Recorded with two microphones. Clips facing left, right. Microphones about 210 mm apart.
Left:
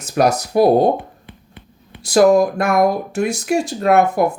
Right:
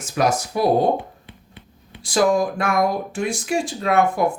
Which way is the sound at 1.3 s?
50° left (ahead or behind).